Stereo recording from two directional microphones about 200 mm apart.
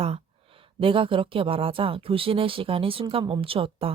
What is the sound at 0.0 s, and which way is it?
A woman's voice, 30° right (ahead or behind).